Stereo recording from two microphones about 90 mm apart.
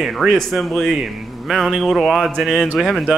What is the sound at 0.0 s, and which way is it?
Speech, centre (ahead or behind).